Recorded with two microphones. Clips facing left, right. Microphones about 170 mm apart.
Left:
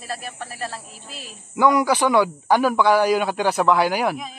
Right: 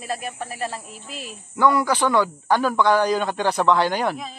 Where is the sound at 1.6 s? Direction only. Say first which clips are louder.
Left 2 dB; 15° left (ahead or behind).